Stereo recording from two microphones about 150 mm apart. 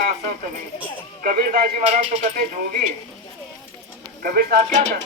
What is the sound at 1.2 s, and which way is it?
Speech, 75° right (ahead or behind).